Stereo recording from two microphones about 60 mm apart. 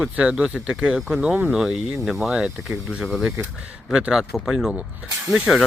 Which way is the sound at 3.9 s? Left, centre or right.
Centre.